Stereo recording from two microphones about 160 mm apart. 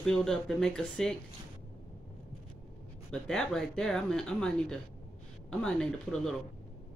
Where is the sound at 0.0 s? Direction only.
5° left (ahead or behind).